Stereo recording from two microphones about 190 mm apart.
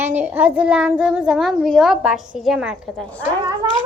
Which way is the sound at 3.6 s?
20° right (ahead or behind).